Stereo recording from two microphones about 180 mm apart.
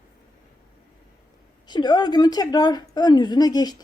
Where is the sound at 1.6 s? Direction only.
25° left (ahead or behind).